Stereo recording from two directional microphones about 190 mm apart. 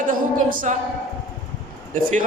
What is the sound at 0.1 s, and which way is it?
Speech, 45° right (ahead or behind).